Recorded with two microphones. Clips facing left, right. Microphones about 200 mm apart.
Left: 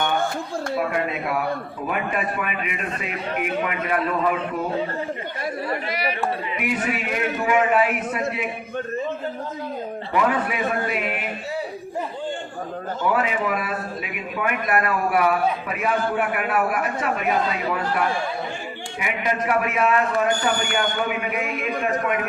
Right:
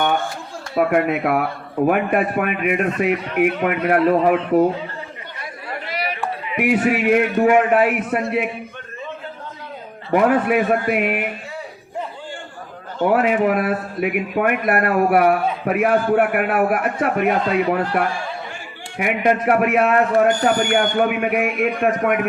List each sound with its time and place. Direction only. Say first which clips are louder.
0.8 s a man's voice: right 10 dB; 60° right (ahead or behind)
4.5 s speech: right 12 dB; 30° right (ahead or behind)
6.6 s a man's voice: right 11 dB; 65° right (ahead or behind)
10.1 s a man's voice: right 7 dB; 55° right (ahead or behind)
13.0 s a man's voice: right 7 dB; 55° right (ahead or behind)